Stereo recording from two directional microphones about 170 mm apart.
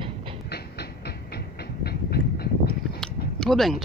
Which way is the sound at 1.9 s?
70° left (ahead or behind).